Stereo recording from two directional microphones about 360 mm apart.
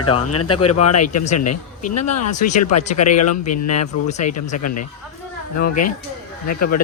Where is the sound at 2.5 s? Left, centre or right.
Left.